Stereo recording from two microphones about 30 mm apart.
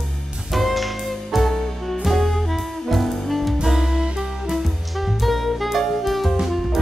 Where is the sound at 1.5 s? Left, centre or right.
Centre.